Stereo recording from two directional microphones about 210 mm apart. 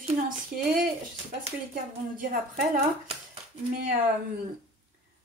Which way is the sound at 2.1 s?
40° right (ahead or behind).